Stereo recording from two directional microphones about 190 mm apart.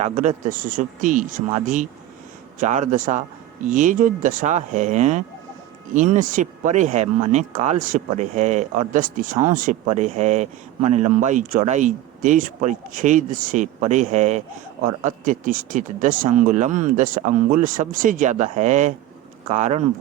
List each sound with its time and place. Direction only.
0.0 s speech: 40° right (ahead or behind)